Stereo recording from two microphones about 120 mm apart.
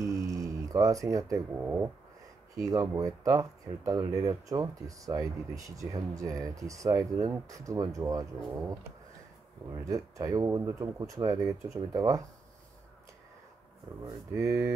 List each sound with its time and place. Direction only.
0.0 s a sound: 25° right (ahead or behind)
1.5 s speech: 15° right (ahead or behind)
2.5 s speech: 30° right (ahead or behind)
9.8 s speech: 30° right (ahead or behind)
14.0 s speech: 25° right (ahead or behind)